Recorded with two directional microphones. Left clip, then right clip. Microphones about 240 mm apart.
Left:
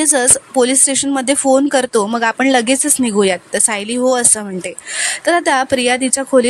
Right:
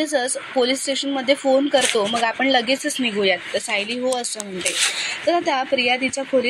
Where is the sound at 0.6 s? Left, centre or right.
Left.